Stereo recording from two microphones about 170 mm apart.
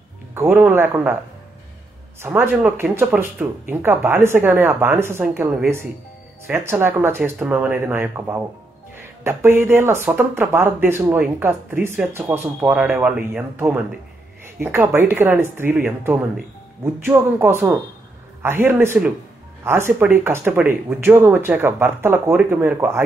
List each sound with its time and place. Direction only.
0.3 s speech: 10° right (ahead or behind)
2.2 s speech: 15° right (ahead or behind)